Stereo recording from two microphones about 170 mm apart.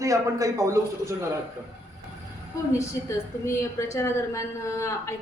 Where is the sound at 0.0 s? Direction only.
20° right (ahead or behind).